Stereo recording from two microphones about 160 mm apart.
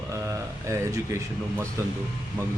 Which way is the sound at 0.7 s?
20° right (ahead or behind).